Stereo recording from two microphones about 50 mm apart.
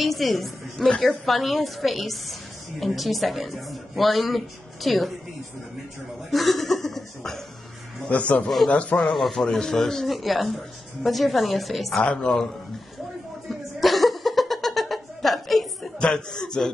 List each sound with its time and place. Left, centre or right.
0.0 s speech: centre
6.3 s speech: centre
8.1 s a man's voice: left
9.0 s speech: centre
12.0 s a man's voice: centre
13.5 s a sound: centre
16.0 s a man's voice: centre